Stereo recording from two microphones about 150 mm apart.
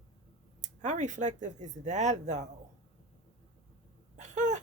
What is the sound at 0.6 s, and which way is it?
Speech, 55° right (ahead or behind).